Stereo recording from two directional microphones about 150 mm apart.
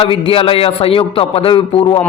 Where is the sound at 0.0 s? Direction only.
35° left (ahead or behind).